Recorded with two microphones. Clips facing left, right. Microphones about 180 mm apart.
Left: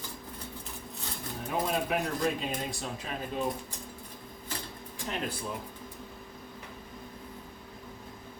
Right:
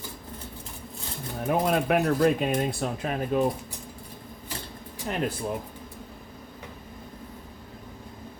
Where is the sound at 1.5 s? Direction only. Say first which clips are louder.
Right 7 dB; 65° right (ahead or behind).